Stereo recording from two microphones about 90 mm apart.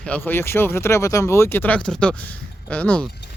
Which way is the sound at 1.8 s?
10° left (ahead or behind).